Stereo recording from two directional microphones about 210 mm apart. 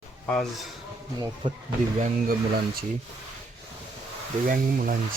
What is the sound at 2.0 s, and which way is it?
Speech, 45° right (ahead or behind).